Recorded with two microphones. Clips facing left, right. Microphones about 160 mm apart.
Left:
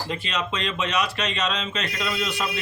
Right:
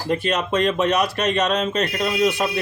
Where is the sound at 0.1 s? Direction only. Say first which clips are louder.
Right 10 dB; 50° right (ahead or behind).